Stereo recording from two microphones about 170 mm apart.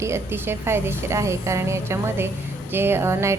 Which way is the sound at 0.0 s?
15° right (ahead or behind).